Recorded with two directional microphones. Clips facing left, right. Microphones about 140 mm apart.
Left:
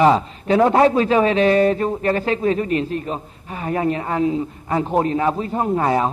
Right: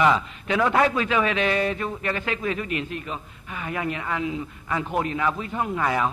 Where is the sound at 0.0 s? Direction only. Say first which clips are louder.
Left 6 dB; 35° left (ahead or behind).